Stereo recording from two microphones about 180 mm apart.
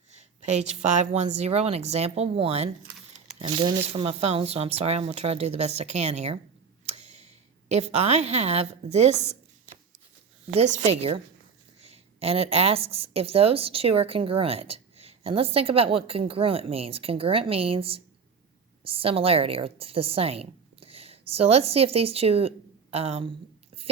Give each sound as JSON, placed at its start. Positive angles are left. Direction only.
{"t": 0.7, "sound": "a woman's voice", "side_deg": -40}
{"t": 6.8, "sound": "tick-tock", "side_deg": -35}
{"t": 7.7, "sound": "a woman's voice", "side_deg": -35}
{"t": 10.5, "sound": "a woman's voice", "side_deg": -35}